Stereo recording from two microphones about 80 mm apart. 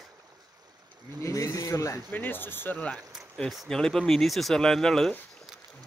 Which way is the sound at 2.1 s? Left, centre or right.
Left.